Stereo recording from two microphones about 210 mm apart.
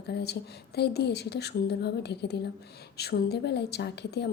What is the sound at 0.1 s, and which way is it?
A woman's voice, 50° left (ahead or behind).